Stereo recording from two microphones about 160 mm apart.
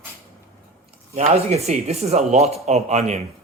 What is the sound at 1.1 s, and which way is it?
Speech, 40° right (ahead or behind).